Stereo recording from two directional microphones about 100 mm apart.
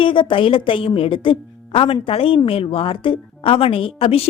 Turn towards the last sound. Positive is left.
turn(degrees=70)  # may be behind; listen again after turning